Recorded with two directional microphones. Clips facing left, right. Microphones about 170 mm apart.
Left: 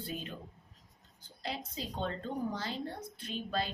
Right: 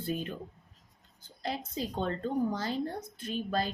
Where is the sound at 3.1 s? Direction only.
45° right (ahead or behind).